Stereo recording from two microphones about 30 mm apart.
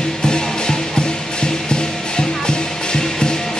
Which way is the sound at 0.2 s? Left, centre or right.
Left.